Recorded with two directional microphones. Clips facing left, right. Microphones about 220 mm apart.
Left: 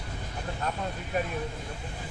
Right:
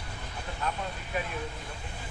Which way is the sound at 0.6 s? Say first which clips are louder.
Even; 45° left (ahead or behind).